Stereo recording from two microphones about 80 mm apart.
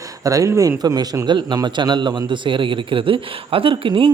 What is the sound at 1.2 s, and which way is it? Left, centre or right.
Speech, right.